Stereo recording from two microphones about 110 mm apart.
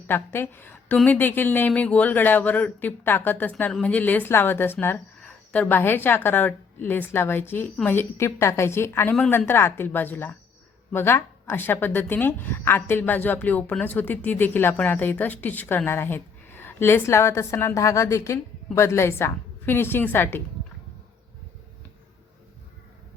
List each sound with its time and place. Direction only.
0.1 s a woman's voice: 20° left (ahead or behind)